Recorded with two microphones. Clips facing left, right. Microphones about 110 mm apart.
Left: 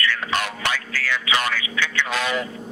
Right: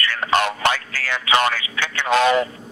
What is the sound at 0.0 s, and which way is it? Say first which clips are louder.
Music: even; 45° right (ahead or behind).